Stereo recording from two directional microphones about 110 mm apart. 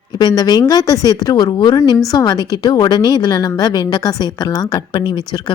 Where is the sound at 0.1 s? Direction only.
40° left (ahead or behind).